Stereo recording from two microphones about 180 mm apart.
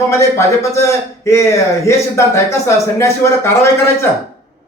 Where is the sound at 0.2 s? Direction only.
15° left (ahead or behind).